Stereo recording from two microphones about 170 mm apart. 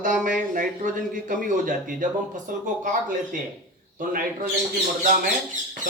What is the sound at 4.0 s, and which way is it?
Speech, 50° right (ahead or behind).